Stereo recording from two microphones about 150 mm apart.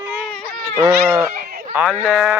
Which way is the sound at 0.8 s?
15° right (ahead or behind).